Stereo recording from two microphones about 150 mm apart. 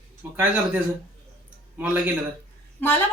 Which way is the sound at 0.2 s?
10° right (ahead or behind).